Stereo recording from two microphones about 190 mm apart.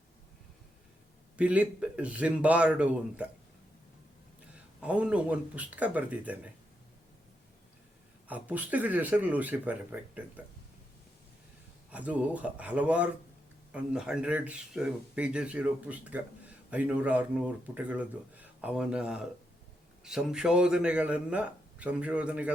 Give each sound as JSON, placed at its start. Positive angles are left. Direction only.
{"t": 1.4, "sound": "speech", "side_deg": -5}
{"t": 4.5, "sound": "speech", "side_deg": -5}
{"t": 8.3, "sound": "speech", "side_deg": -10}
{"t": 11.9, "sound": "a man's voice", "side_deg": -5}